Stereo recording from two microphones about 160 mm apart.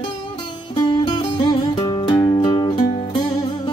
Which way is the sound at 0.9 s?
30° left (ahead or behind).